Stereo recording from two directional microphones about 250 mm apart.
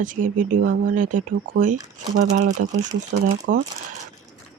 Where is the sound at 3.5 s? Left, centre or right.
Right.